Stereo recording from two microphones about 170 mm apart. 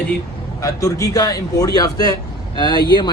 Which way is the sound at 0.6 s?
20° left (ahead or behind).